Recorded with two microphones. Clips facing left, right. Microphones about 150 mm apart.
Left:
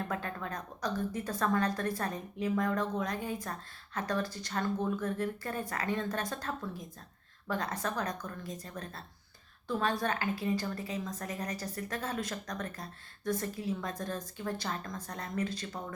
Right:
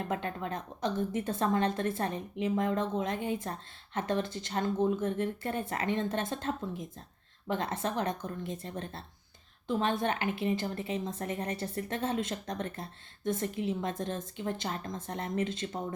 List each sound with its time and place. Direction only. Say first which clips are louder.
0.1 s a woman's voice: right 3 dB; 25° right (ahead or behind)